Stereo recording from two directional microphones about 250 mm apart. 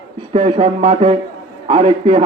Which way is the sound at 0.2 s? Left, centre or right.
Centre.